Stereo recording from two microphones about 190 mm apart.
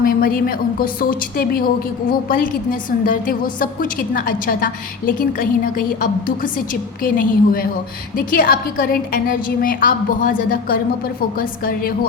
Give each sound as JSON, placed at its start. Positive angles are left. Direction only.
{"t": 0.0, "sound": "a woman's voice", "side_deg": 50}